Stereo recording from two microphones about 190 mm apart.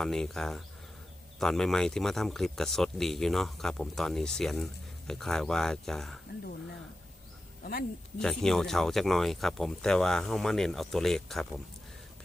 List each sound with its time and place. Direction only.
0.0 s speech: centre (ahead or behind)
7.6 s speech: 50° left (ahead or behind)
8.2 s speech: 5° left (ahead or behind)